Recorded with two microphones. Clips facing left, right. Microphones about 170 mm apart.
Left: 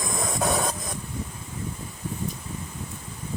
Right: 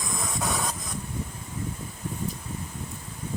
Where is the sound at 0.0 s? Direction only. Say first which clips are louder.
Left 4 dB; 50° left (ahead or behind).